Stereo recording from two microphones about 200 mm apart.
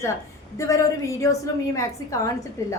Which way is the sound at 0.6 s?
15° left (ahead or behind).